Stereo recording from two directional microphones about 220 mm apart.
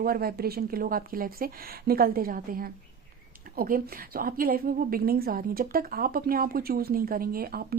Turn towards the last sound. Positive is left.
turn(degrees=-45)  # may be behind; listen again after turning